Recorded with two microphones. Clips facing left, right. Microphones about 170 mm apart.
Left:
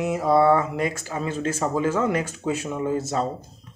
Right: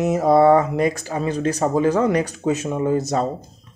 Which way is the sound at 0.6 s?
40° right (ahead or behind).